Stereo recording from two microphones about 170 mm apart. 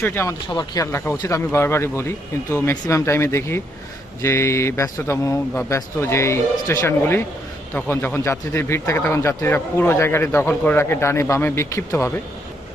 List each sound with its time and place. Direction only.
0.0 s speech: 15° left (ahead or behind)
0.4 s speech: 25° left (ahead or behind)